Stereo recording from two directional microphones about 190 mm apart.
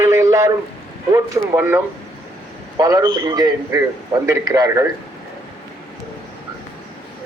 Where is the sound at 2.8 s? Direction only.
20° right (ahead or behind).